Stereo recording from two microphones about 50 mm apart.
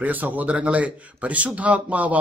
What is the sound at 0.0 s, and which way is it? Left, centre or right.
Speech, right.